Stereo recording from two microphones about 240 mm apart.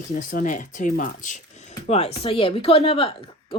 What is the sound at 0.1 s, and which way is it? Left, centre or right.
A woman's voice, left.